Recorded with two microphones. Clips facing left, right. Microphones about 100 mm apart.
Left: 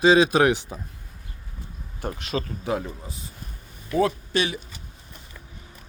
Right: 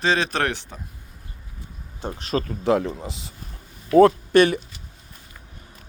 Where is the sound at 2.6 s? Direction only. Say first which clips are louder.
Right 7 dB; 75° right (ahead or behind).